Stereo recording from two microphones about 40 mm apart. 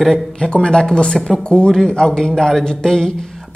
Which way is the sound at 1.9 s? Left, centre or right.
Centre.